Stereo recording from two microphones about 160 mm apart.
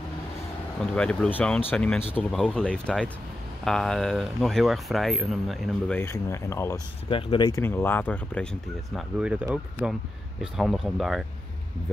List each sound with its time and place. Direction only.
0.9 s speech: 5° left (ahead or behind)
5.9 s speech: 15° left (ahead or behind)
7.1 s speech: 35° left (ahead or behind)
7.6 s speech: 15° left (ahead or behind)
9.2 s speech: 10° right (ahead or behind)